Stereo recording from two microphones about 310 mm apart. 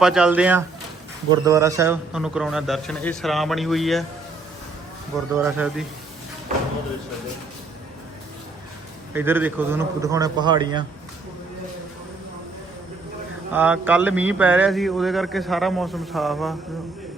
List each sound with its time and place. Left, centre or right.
0.0 s a man's voice: centre
5.3 s a man's voice: centre
9.1 s a man's voice: centre
13.5 s a man's voice: centre